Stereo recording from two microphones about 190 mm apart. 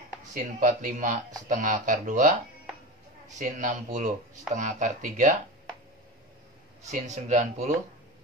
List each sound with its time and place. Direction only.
0.3 s speech: 45° right (ahead or behind)
3.3 s speech: 40° right (ahead or behind)
6.9 s speech: 40° right (ahead or behind)